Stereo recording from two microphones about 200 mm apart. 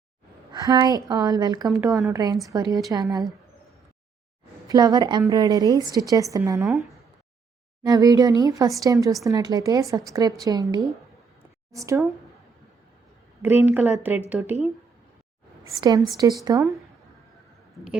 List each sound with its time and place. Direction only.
0.6 s a woman's voice: 15° right (ahead or behind)
4.7 s a woman's voice: 20° right (ahead or behind)
7.9 s a woman's voice: 20° right (ahead or behind)
13.4 s a woman's voice: 10° right (ahead or behind)
15.6 s a woman's voice: 15° right (ahead or behind)